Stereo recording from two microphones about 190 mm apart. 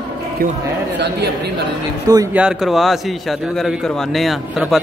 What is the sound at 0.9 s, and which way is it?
Speech, 60° right (ahead or behind).